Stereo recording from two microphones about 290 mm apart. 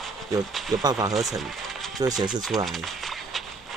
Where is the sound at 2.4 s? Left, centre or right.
Centre.